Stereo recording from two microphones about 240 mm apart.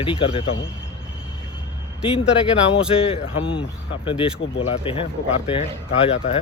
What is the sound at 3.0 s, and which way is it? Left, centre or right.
Speech, left.